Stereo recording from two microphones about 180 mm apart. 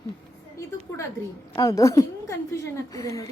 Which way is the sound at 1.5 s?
20° left (ahead or behind).